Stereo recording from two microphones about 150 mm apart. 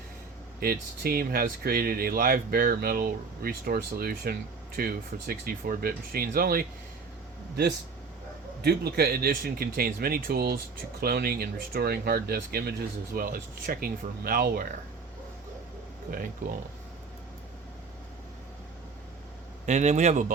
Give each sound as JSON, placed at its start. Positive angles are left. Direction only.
{"t": 0.6, "sound": "speech", "side_deg": -90}
{"t": 8.6, "sound": "speech", "side_deg": -90}
{"t": 13.1, "sound": "speech", "side_deg": -75}
{"t": 16.0, "sound": "speech", "side_deg": -70}
{"t": 19.6, "sound": "a man's voice", "side_deg": -50}